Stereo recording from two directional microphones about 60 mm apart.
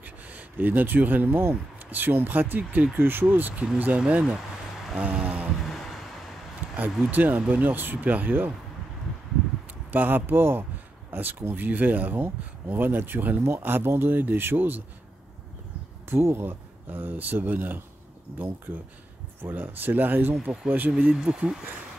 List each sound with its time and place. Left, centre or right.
0.0 s speech: right
4.9 s a sound: centre
5.7 s a sound: centre
6.8 s speech: right
9.8 s speech: right
16.1 s speech: right
16.9 s speech: right
19.4 s speech: right
20.9 s speech: centre